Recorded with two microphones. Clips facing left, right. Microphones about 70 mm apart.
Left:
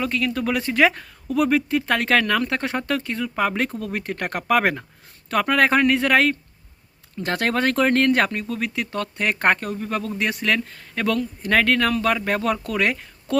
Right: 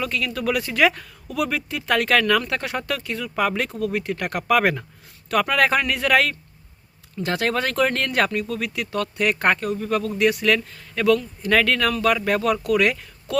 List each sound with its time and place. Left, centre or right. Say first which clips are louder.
0.0 s speech: left 1 dB; left
7.2 s speech: left 1 dB; left